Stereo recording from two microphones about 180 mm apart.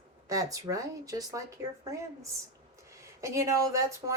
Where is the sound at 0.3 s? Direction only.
20° right (ahead or behind).